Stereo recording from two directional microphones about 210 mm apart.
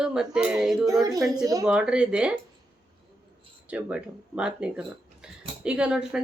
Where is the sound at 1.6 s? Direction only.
5° right (ahead or behind).